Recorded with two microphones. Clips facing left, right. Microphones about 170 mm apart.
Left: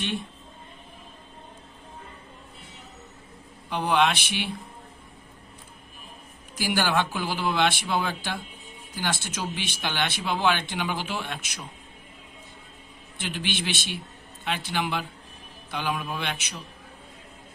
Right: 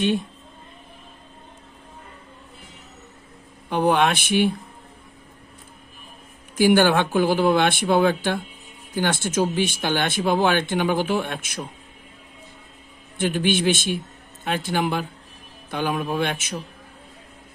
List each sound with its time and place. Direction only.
3.7 s speech: 50° right (ahead or behind)
6.6 s speech: 55° right (ahead or behind)
13.1 s speech: 50° right (ahead or behind)